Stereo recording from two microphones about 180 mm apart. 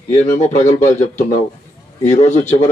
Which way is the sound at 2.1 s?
40° left (ahead or behind).